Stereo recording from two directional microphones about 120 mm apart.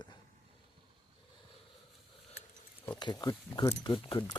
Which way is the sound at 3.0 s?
35° left (ahead or behind).